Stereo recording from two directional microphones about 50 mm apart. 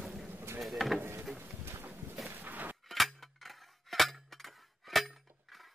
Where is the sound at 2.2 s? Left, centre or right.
Right.